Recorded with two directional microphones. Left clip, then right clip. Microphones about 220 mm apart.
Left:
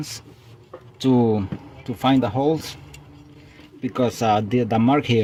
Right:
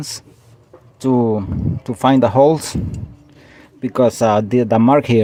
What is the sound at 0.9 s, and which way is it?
Speech, 10° right (ahead or behind).